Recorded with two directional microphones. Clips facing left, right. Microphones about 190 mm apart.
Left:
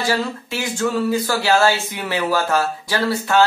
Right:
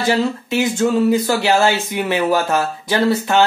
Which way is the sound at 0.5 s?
20° right (ahead or behind).